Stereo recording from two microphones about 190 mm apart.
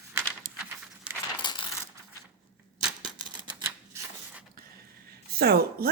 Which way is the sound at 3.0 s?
20° right (ahead or behind).